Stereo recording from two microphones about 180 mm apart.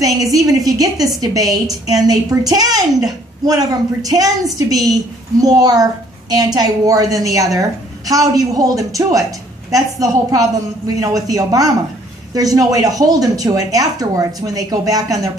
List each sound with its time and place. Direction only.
0.3 s a woman's voice: 20° right (ahead or behind)